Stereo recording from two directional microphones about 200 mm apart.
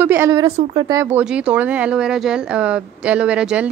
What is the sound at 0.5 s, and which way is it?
Speech, 30° right (ahead or behind).